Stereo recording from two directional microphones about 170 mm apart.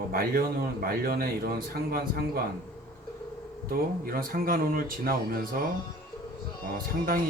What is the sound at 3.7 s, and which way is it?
Speech, 60° right (ahead or behind).